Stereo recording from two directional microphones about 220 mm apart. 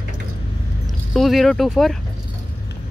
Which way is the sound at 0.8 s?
Centre (ahead or behind).